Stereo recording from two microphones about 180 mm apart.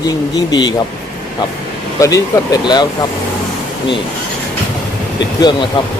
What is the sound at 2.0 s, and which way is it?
Speech, 20° left (ahead or behind).